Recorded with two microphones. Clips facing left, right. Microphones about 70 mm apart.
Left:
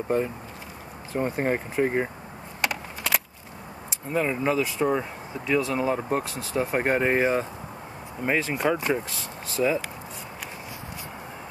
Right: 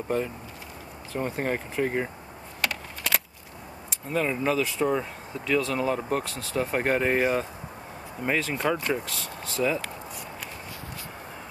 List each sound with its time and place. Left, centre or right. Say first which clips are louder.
1.1 s speech: left 3 dB; left
2.6 s a sound: left 2 dB; centre
4.1 s speech: left 1 dB; centre